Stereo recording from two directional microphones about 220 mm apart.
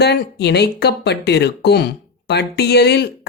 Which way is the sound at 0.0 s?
50° left (ahead or behind).